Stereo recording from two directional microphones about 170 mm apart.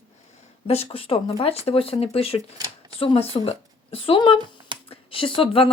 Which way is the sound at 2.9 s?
35° left (ahead or behind).